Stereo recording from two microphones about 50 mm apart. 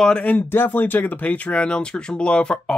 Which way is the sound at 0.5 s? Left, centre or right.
Left.